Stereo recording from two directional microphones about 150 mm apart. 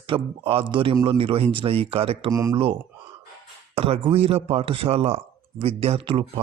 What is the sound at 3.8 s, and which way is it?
Speech, 40° right (ahead or behind).